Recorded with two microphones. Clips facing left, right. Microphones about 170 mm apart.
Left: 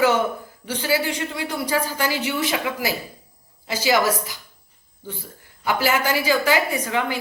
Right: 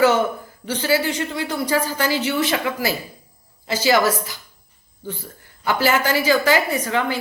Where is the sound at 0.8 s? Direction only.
10° left (ahead or behind).